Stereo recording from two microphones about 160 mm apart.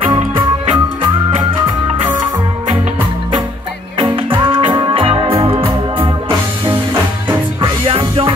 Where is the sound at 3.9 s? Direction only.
30° right (ahead or behind).